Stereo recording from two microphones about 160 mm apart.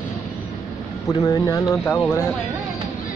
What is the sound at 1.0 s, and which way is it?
Speech, 20° left (ahead or behind).